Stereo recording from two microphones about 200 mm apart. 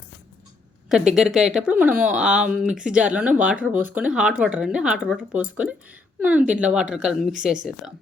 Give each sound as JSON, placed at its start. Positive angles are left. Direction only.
{"t": 0.9, "sound": "speech", "side_deg": -5}